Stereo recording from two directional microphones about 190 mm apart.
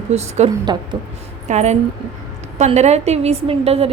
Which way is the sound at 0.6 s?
20° right (ahead or behind).